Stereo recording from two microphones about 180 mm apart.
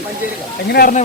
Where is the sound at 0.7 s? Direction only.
60° left (ahead or behind).